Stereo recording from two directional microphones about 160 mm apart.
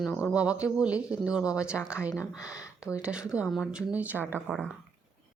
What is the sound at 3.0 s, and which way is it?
Speech, 5° right (ahead or behind).